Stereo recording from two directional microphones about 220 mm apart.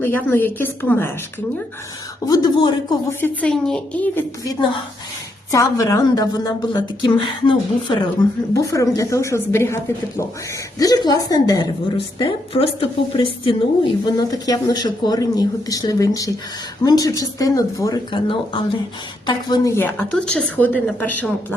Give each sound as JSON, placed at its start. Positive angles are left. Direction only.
{"t": 0.0, "sound": "a woman's voice", "side_deg": 10}
{"t": 2.2, "sound": "a woman's voice", "side_deg": 15}